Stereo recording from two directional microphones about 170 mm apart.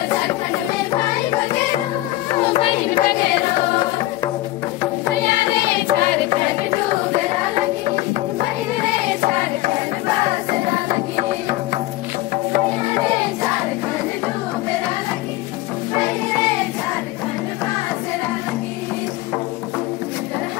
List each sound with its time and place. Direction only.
2.5 s music: 35° left (ahead or behind)